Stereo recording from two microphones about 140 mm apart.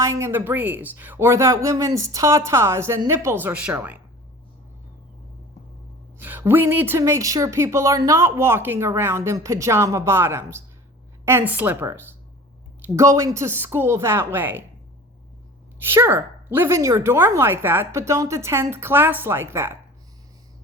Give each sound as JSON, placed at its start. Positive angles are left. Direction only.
{"t": 0.0, "sound": "speech", "side_deg": -20}
{"t": 6.1, "sound": "speech", "side_deg": -15}
{"t": 15.8, "sound": "speech", "side_deg": -15}